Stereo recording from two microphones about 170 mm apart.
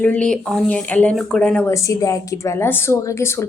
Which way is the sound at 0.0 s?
10° left (ahead or behind).